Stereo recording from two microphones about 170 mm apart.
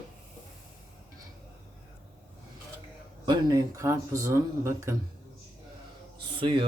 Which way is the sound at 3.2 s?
20° right (ahead or behind).